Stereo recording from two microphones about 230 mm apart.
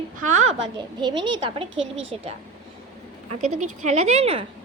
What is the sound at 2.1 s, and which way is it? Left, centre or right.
Speech, right.